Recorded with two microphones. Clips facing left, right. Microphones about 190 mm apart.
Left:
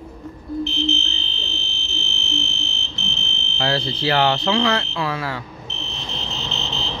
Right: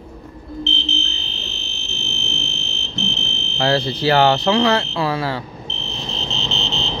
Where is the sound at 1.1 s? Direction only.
45° right (ahead or behind).